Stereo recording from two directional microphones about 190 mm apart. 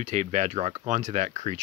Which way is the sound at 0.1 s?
35° right (ahead or behind).